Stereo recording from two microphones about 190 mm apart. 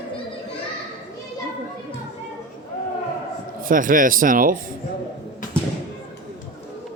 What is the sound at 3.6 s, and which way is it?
Speech, 45° right (ahead or behind).